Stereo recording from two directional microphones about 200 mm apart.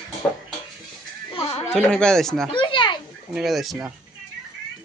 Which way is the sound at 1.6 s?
5° left (ahead or behind).